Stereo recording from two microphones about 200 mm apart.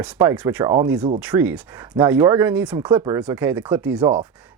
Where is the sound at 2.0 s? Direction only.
15° right (ahead or behind).